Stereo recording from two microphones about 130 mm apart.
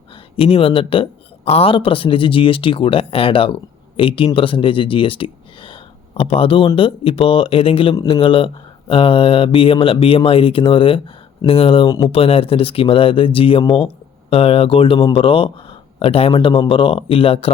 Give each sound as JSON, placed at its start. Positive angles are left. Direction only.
{"t": 0.3, "sound": "speech", "side_deg": 45}
{"t": 11.9, "sound": "speech", "side_deg": 30}
{"t": 12.1, "sound": "speech", "side_deg": 45}